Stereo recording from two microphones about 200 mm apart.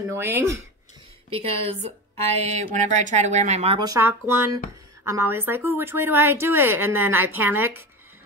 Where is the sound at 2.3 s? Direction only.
35° right (ahead or behind).